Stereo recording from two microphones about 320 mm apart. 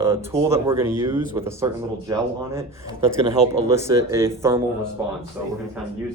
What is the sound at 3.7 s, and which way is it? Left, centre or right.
Speech, centre.